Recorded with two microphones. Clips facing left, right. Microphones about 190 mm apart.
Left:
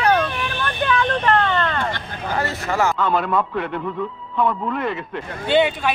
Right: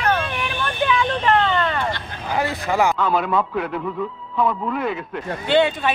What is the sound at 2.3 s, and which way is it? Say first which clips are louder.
Speech: right 2 dB; 15° right (ahead or behind).